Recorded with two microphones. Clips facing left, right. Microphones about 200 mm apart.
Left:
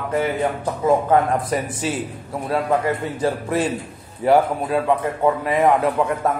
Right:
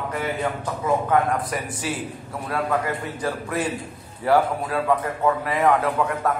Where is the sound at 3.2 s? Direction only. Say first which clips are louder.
Left 4 dB; 25° left (ahead or behind).